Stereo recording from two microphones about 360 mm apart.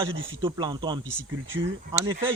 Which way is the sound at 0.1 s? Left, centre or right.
Right.